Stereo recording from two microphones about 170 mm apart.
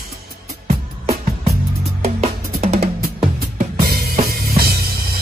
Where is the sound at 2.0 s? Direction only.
40° right (ahead or behind).